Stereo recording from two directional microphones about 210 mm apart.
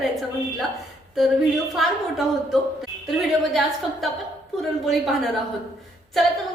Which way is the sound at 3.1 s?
Centre (ahead or behind).